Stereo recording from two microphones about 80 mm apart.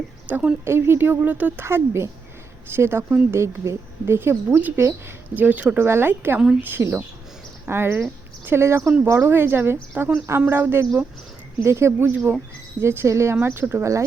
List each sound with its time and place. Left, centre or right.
0.3 s a woman's voice: right
1.6 s a woman's voice: right
3.4 s speech: right
4.0 s a woman's voice: right
5.8 s a woman's voice: right
12.1 s a woman's voice: right
12.8 s a woman's voice: right